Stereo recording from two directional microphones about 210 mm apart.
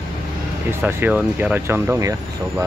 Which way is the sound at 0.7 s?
10° right (ahead or behind).